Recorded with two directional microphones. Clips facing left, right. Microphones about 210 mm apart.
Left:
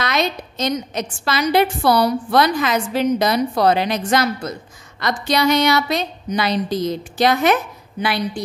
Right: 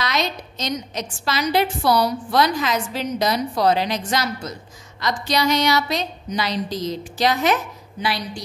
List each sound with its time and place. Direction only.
0.0 s a woman's voice: 55° left (ahead or behind)